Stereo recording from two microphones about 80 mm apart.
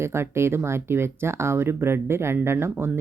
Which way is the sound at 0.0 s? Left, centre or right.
Right.